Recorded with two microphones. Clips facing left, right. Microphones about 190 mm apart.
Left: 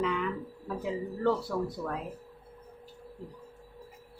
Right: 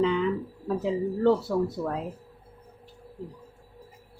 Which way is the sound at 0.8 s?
25° right (ahead or behind).